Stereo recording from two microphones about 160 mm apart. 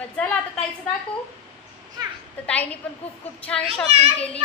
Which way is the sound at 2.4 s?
10° left (ahead or behind).